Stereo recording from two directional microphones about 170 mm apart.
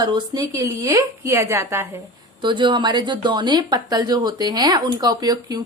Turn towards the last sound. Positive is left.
turn(degrees=-25)  # may be behind; listen again after turning